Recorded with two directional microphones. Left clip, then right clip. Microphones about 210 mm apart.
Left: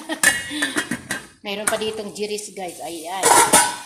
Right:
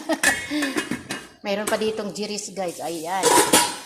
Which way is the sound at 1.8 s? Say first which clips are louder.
Even; 15° right (ahead or behind).